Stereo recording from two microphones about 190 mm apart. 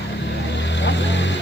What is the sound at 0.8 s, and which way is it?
Vehicle, 70° left (ahead or behind).